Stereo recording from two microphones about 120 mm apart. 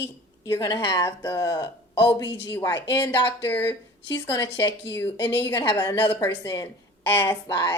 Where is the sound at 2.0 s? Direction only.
40° left (ahead or behind).